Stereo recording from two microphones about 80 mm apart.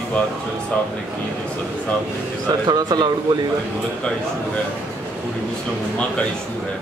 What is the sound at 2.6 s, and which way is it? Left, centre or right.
Speech, right.